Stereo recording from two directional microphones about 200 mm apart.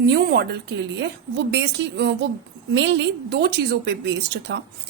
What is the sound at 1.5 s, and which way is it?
A woman's voice, 55° right (ahead or behind).